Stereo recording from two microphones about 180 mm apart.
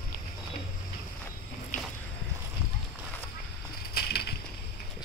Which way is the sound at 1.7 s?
45° left (ahead or behind).